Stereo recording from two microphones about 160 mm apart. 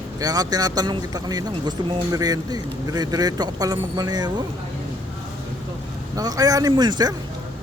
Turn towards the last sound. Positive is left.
turn(degrees=-25)  # may be behind; listen again after turning